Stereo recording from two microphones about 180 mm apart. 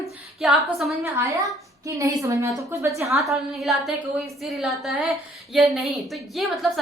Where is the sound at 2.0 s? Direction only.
15° right (ahead or behind).